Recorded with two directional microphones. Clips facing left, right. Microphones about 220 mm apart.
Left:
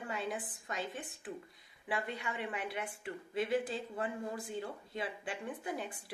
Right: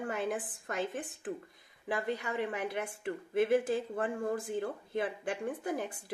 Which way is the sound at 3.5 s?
50° right (ahead or behind).